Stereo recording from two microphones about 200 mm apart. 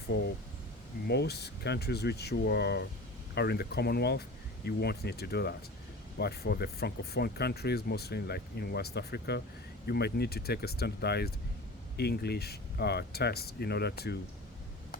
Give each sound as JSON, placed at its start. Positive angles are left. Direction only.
{"t": 0.1, "sound": "speech", "side_deg": 60}